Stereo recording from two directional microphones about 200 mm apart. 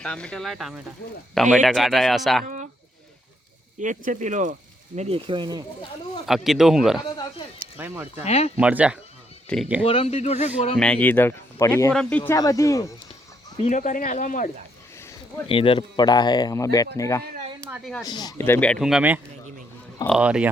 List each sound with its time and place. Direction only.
0.0 s speech: 5° left (ahead or behind)
2.4 s speech: 40° right (ahead or behind)
3.8 s speech: 40° right (ahead or behind); by 5.6 s 20° right (ahead or behind)
6.2 s speech: centre (ahead or behind)
8.2 s speech: 30° left (ahead or behind)
8.5 s speech: 5° right (ahead or behind)
9.8 s speech: 30° left (ahead or behind)
10.8 s speech: 5° left (ahead or behind)
13.7 s speech: 40° left (ahead or behind)
15.4 s speech: 25° left (ahead or behind); by 20.5 s 5° right (ahead or behind)